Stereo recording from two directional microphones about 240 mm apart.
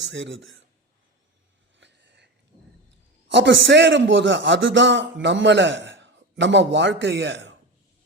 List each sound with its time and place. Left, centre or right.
0.1 s a man's voice: right
1.8 s a sound: right
3.2 s a man's voice: right